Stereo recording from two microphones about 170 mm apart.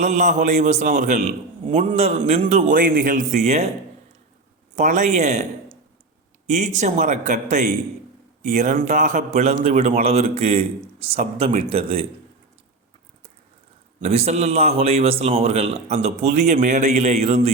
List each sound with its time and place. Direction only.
0.0 s a man's voice: 45° right (ahead or behind)
4.8 s a man's voice: 45° right (ahead or behind)
6.5 s a man's voice: 45° right (ahead or behind)
14.0 s a man's voice: 40° right (ahead or behind)